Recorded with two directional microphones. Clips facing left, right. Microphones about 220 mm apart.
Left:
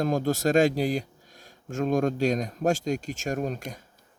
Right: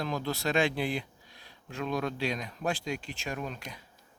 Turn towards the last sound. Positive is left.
turn(degrees=45)  # may be behind; listen again after turning